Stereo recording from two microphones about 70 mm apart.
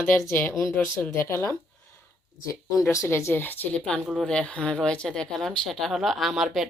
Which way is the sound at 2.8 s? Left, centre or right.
Left.